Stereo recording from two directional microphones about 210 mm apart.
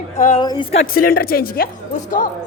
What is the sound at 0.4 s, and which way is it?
Speech, 20° left (ahead or behind).